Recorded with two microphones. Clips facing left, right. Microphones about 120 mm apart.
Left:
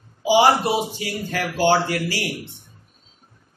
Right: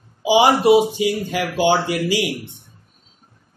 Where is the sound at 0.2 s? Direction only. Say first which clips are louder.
Right 2 dB; 15° right (ahead or behind).